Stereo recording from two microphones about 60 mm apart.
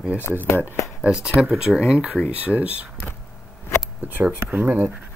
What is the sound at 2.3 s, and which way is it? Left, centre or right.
Speech, right.